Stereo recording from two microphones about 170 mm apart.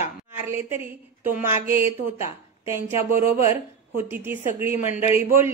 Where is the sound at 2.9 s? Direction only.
40° left (ahead or behind).